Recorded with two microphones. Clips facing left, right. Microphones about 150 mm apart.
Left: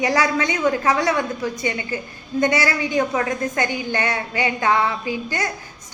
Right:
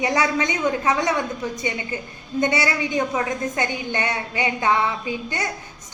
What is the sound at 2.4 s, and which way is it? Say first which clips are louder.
A woman's voice: left 2 dB; 25° right (ahead or behind).